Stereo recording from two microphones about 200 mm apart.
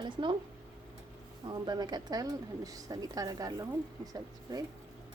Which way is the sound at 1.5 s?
20° right (ahead or behind).